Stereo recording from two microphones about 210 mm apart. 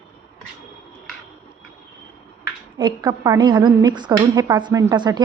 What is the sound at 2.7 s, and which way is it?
Speech, 20° right (ahead or behind).